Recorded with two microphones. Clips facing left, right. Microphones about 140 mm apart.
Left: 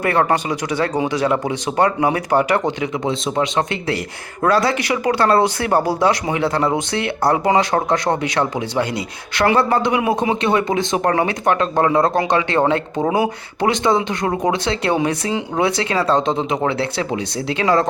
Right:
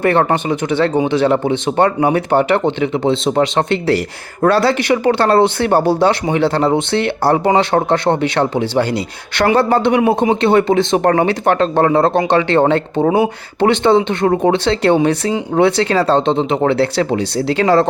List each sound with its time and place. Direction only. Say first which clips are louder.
0.0 s speech: right 3 dB; 25° right (ahead or behind)
5.0 s speech: right 3 dB; 30° right (ahead or behind)
16.6 s speech: right 6 dB; 35° right (ahead or behind)